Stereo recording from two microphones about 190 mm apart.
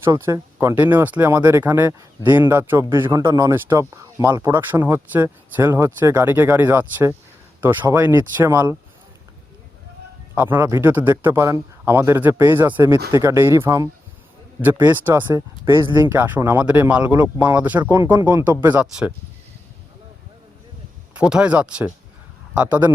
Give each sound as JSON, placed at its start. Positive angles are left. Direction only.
{"t": 0.0, "sound": "speech", "side_deg": -15}
{"t": 10.3, "sound": "speech", "side_deg": -10}
{"t": 21.2, "sound": "speech", "side_deg": -5}